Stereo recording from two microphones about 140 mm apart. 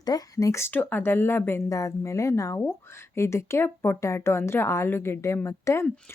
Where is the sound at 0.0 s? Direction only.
25° left (ahead or behind).